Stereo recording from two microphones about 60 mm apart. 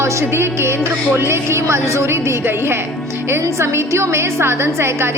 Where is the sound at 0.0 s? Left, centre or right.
Right.